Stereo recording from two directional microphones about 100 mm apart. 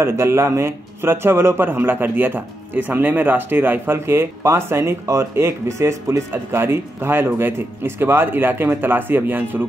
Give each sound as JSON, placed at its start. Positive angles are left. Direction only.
{"t": 0.0, "sound": "speech", "side_deg": -25}